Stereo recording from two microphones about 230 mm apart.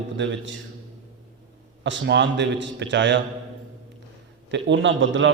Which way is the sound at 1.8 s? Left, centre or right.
Right.